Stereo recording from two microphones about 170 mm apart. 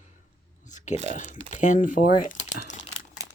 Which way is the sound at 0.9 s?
40° right (ahead or behind).